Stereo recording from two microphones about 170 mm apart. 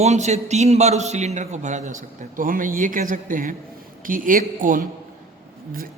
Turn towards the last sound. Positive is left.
turn(degrees=-50)  # may be behind; listen again after turning